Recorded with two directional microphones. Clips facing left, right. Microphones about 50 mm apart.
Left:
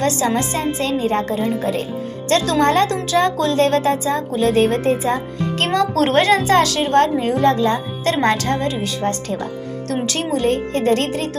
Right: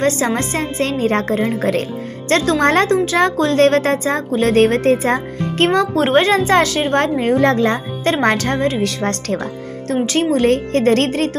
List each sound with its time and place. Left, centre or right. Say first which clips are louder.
0.3 s a woman's voice: right 1 dB; right
5.5 s speech: right 3 dB; right
8.8 s speech: right 2 dB; right
9.9 s speech: right 5 dB; right
10.3 s a woman's voice: right 2 dB; right